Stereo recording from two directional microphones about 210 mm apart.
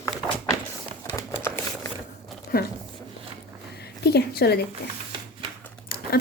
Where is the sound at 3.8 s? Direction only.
50° left (ahead or behind).